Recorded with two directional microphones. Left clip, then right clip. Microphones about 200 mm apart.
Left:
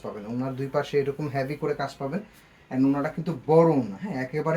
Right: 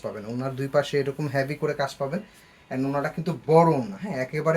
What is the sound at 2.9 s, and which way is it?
Speech, 45° right (ahead or behind).